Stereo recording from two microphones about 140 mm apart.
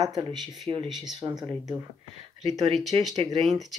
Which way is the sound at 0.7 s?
35° right (ahead or behind).